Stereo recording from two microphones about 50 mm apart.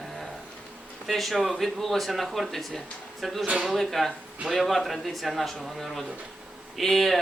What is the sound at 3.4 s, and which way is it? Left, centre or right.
Speech, right.